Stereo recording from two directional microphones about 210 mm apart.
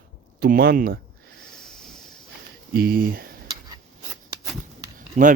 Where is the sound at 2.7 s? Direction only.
45° right (ahead or behind).